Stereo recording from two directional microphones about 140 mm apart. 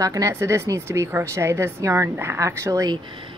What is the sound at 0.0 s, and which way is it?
Speech, 25° right (ahead or behind).